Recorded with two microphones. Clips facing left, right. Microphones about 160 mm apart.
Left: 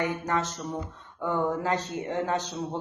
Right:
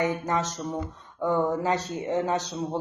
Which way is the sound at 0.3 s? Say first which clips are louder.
Right 1 dB; 15° right (ahead or behind).